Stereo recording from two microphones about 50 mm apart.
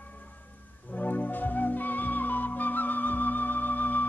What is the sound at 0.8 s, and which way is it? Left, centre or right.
Music, left.